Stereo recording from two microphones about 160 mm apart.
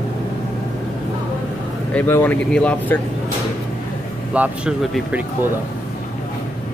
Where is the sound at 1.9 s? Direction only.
10° left (ahead or behind).